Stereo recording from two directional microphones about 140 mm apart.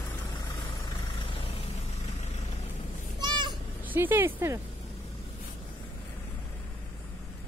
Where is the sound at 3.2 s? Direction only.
30° right (ahead or behind).